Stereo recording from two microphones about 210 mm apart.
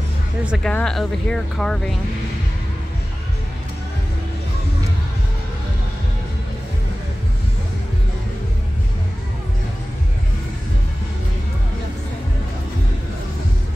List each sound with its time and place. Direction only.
0.5 s speech: 5° left (ahead or behind)